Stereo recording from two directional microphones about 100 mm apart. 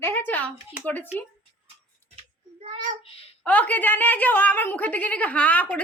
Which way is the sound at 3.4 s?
15° left (ahead or behind).